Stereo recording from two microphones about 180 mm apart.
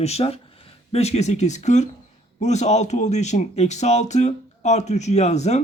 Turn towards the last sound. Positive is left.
turn(degrees=40)  # may be behind; listen again after turning